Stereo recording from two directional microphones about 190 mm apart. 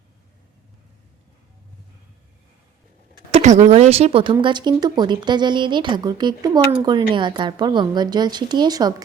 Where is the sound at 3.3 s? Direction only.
40° right (ahead or behind).